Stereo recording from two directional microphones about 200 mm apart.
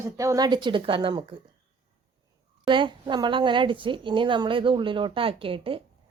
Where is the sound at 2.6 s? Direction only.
25° right (ahead or behind).